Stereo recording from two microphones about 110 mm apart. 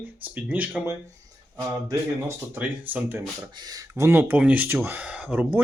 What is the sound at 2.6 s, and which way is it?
Speech, 15° right (ahead or behind).